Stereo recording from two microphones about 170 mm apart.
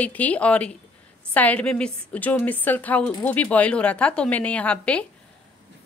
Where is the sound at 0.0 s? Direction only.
10° left (ahead or behind).